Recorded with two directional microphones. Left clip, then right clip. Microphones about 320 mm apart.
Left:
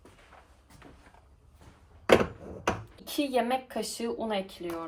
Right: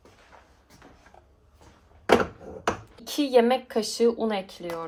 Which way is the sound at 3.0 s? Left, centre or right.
Right.